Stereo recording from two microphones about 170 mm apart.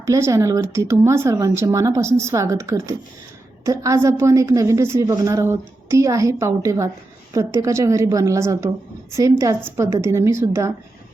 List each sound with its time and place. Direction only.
0.0 s a woman's voice: 20° right (ahead or behind)